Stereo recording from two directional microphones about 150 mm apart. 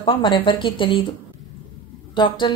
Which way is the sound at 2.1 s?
35° left (ahead or behind).